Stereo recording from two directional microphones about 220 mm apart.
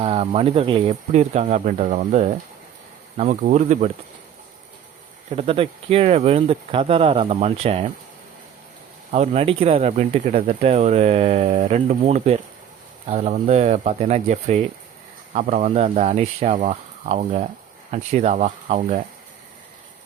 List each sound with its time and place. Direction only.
0.0 s speech: 25° right (ahead or behind)
5.4 s speech: 25° right (ahead or behind)
9.1 s speech: 30° right (ahead or behind)